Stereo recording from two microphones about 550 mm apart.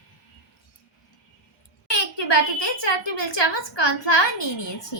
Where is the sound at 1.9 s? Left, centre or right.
Left.